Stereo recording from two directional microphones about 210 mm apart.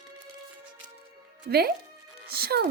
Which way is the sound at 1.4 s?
50° right (ahead or behind).